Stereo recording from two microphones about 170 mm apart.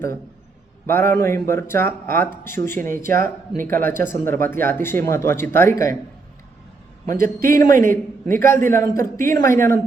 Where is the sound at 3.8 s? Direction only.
15° left (ahead or behind).